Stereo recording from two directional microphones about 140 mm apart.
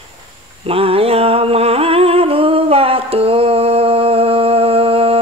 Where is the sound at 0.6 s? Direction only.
45° right (ahead or behind).